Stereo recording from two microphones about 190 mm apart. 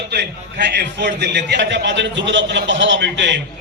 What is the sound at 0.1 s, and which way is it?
A man's voice, 60° right (ahead or behind).